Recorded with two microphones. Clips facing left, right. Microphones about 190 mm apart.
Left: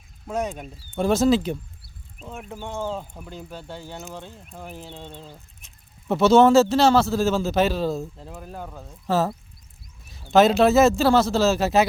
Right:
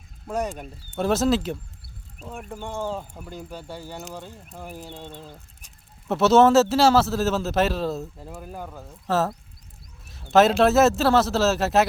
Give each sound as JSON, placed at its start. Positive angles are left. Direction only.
{"t": 0.3, "sound": "a man's voice", "side_deg": 0}
{"t": 2.7, "sound": "a man's voice", "side_deg": -10}